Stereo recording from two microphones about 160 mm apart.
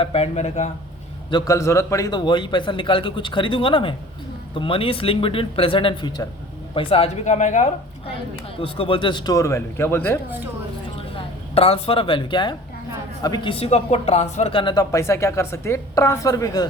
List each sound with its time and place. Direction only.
0.0 s speech: 40° left (ahead or behind)
1.3 s speech: 30° left (ahead or behind)
1.5 s speech: 15° left (ahead or behind); by 7.7 s 45° left (ahead or behind)
8.6 s speech: 35° left (ahead or behind); by 10.2 s 15° left (ahead or behind)
11.1 s speech: 40° left (ahead or behind)